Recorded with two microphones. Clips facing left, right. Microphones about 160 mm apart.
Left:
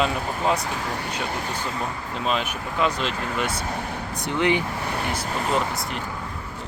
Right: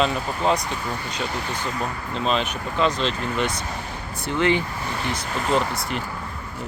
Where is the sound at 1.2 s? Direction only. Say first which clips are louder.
Even; 50° left (ahead or behind).